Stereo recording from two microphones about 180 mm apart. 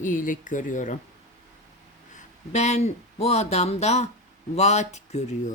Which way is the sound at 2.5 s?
40° left (ahead or behind).